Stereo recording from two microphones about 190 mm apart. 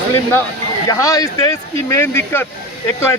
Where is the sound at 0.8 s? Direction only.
15° left (ahead or behind).